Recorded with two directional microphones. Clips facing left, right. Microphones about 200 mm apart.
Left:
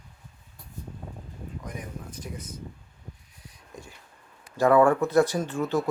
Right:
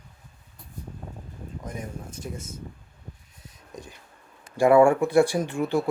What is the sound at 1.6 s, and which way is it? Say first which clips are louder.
Speech: right 4 dB; 25° right (ahead or behind).